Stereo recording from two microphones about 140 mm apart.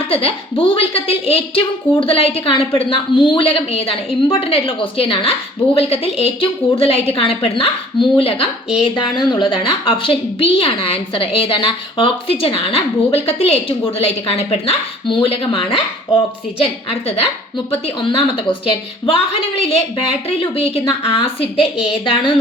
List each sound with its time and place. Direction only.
0.0 s a woman's voice: 40° left (ahead or behind)
16.9 s a woman's voice: 45° left (ahead or behind)